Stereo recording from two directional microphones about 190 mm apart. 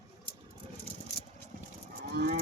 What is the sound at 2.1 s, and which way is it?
Moo, 55° right (ahead or behind).